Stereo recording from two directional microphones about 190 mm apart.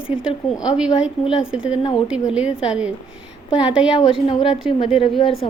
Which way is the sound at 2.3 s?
5° right (ahead or behind).